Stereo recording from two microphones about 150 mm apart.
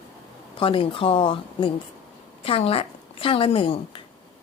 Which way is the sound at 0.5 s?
35° left (ahead or behind).